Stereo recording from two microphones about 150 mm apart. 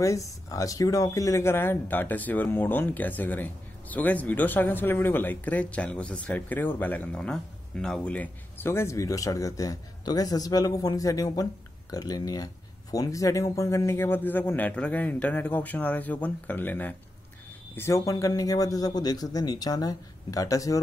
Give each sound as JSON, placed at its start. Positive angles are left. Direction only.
{"t": 0.0, "sound": "a man's voice", "side_deg": 20}